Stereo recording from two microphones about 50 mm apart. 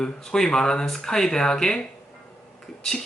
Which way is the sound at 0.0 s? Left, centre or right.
Centre.